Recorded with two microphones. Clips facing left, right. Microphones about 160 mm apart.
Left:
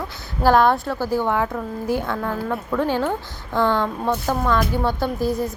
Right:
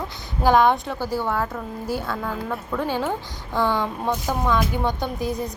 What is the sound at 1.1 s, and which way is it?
Speech, 15° left (ahead or behind).